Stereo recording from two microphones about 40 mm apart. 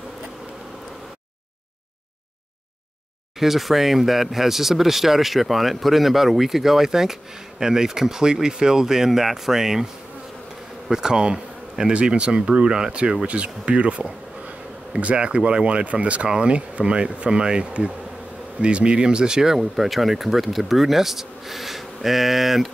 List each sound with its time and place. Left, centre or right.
3.3 s speech: centre
10.9 s speech: centre